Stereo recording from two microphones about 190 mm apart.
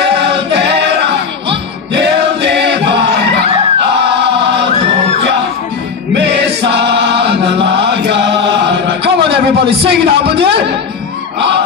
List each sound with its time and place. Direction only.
2.0 s choir: 65° right (ahead or behind)
6.1 s chant: 65° right (ahead or behind)
8.6 s a sound: 65° right (ahead or behind)